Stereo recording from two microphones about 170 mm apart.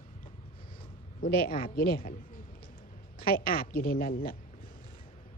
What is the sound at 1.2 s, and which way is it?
A man's voice, 60° left (ahead or behind).